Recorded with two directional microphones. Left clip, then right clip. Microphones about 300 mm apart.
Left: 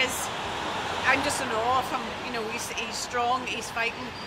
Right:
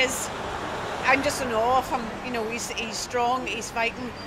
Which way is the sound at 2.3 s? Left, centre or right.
Centre.